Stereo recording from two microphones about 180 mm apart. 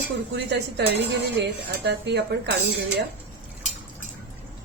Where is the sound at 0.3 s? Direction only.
70° right (ahead or behind).